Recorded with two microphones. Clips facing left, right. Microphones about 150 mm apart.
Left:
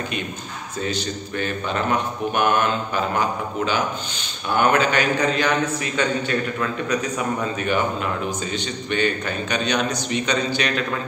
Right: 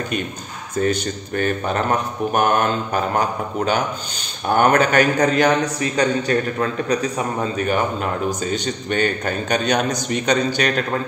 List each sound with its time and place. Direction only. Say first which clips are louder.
0.7 s a man's voice: right 6 dB; 50° right (ahead or behind)